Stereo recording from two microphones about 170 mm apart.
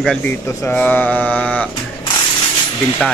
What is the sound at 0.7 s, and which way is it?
Mantra, 5° left (ahead or behind).